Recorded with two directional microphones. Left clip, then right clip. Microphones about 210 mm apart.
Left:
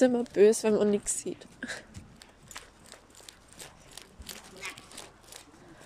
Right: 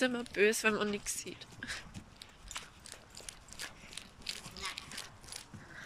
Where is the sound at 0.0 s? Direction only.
30° left (ahead or behind).